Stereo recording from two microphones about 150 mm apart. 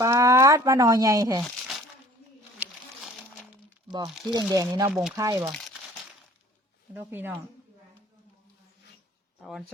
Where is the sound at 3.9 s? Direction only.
30° right (ahead or behind).